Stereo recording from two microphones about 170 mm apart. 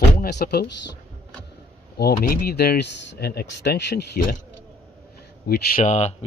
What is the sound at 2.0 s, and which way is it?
Speech, 65° left (ahead or behind).